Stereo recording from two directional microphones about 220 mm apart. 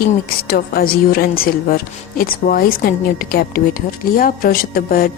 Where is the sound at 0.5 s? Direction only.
45° left (ahead or behind).